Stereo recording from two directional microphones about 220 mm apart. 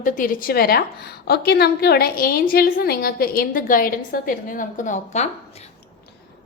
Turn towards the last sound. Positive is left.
turn(degrees=30)  # may be behind; listen again after turning